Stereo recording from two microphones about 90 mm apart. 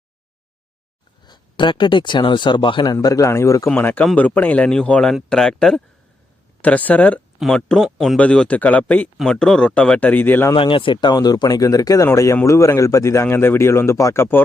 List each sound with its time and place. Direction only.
1.2 s speech: 55° left (ahead or behind)
2.8 s a man's voice: 45° left (ahead or behind)
3.8 s a man's voice: 20° left (ahead or behind)
6.6 s speech: 15° left (ahead or behind)
7.3 s speech: 5° left (ahead or behind); by 10.5 s 20° left (ahead or behind)
10.5 s a man's voice: 70° left (ahead or behind); by 14.4 s 25° left (ahead or behind)